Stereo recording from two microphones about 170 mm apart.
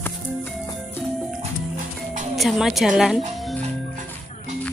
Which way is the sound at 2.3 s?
Centre (ahead or behind).